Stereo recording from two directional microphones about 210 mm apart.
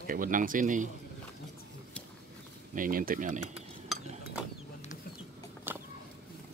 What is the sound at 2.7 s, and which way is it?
Speech, 40° right (ahead or behind).